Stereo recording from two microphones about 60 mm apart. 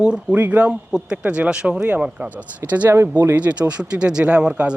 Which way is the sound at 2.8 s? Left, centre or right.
Right.